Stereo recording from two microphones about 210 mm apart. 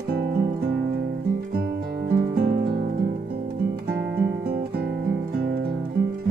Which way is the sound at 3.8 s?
45° right (ahead or behind).